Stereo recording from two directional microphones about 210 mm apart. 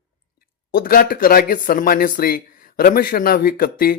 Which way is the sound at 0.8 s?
45° left (ahead or behind).